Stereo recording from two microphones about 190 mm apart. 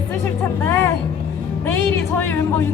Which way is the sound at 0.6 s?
10° left (ahead or behind).